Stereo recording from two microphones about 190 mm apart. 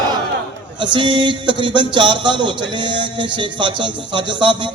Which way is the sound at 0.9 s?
25° right (ahead or behind).